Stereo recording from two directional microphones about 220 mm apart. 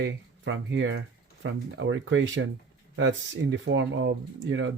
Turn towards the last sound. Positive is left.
turn(degrees=-60)  # may be behind; listen again after turning